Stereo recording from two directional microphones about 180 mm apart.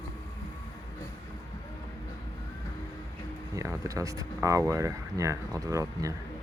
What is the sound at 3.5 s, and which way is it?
Speech, 20° right (ahead or behind).